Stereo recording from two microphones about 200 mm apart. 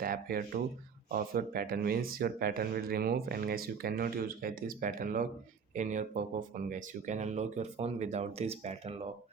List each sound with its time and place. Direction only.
0.0 s speech: 45° right (ahead or behind)